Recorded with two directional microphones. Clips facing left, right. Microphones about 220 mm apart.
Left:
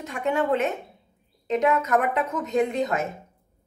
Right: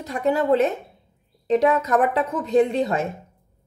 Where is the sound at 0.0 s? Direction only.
35° right (ahead or behind).